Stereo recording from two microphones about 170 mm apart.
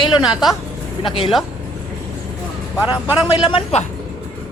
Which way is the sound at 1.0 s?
30° left (ahead or behind).